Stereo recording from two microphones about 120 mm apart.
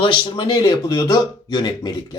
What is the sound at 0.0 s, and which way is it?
Speech, 40° left (ahead or behind).